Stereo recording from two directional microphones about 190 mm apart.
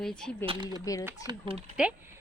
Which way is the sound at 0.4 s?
25° right (ahead or behind).